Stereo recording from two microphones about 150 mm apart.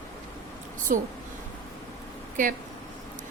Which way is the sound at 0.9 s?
65° right (ahead or behind).